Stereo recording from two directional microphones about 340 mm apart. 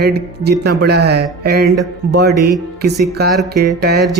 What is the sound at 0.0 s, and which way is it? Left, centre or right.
Speech, right.